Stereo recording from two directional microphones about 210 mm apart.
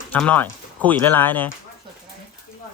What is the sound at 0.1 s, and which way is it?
Speech, 5° left (ahead or behind).